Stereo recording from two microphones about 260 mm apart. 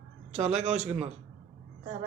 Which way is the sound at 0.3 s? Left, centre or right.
Right.